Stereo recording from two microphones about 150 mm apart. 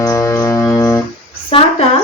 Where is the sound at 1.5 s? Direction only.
40° left (ahead or behind).